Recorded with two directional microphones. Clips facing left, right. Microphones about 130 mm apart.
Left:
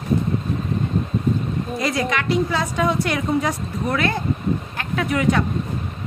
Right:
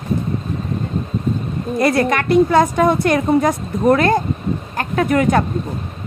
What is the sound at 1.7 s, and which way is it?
A woman's voice, 55° right (ahead or behind).